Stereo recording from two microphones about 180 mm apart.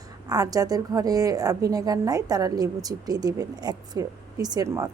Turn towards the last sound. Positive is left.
turn(degrees=-15)  # may be behind; listen again after turning